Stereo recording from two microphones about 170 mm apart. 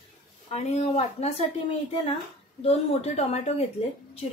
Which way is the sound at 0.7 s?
40° left (ahead or behind).